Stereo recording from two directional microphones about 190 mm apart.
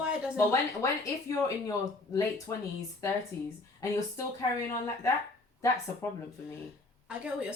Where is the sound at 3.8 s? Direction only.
20° left (ahead or behind).